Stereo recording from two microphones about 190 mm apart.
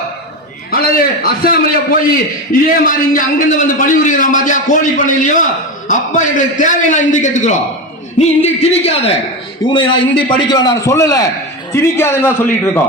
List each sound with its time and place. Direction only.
0.7 s a man's voice: 50° left (ahead or behind); by 12.8 s 10° left (ahead or behind)